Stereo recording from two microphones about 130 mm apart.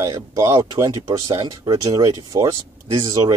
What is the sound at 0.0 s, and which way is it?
Speech, 25° right (ahead or behind).